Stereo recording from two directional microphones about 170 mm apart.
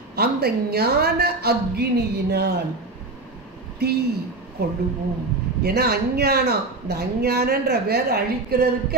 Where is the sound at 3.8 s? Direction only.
70° right (ahead or behind).